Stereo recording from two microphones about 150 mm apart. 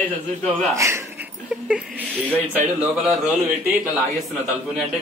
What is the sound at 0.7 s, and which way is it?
Speech, 20° right (ahead or behind).